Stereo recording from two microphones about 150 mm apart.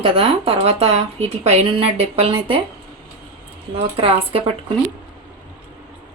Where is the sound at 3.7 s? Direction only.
40° right (ahead or behind).